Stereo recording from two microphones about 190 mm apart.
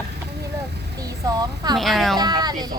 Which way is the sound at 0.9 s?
20° right (ahead or behind).